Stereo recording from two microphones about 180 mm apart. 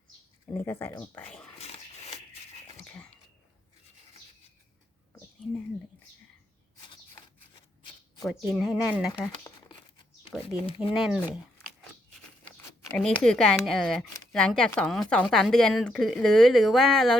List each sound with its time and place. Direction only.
0.5 s speech: 15° left (ahead or behind)
1.5 s dog: 35° left (ahead or behind)
2.8 s a sound: 5° left (ahead or behind)
8.2 s speech: centre (ahead or behind)
10.4 s speech: 30° left (ahead or behind)
10.9 s speech: centre (ahead or behind)
12.9 s speech: 5° left (ahead or behind)